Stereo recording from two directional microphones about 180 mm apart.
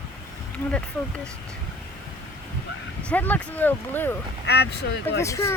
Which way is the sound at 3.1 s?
10° left (ahead or behind).